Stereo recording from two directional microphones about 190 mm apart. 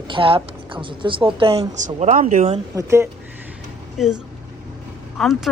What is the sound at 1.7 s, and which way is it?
Speech, 40° right (ahead or behind).